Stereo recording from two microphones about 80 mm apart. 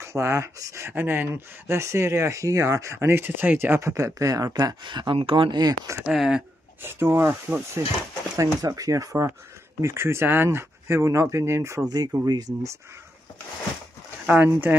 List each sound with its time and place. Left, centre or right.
0.0 s speech: right
3.9 s speech: right
4.8 s speech: right
6.0 s speech: centre
6.8 s speech: right
8.6 s speech: right
11.9 s speech: right
14.2 s speech: right